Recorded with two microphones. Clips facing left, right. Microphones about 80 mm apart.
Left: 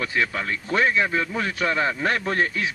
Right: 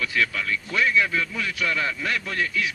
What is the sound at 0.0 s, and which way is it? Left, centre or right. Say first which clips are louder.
A man's voice: left 1 dB; left.